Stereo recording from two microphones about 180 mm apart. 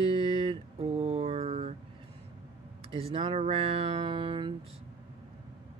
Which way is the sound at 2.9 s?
30° right (ahead or behind).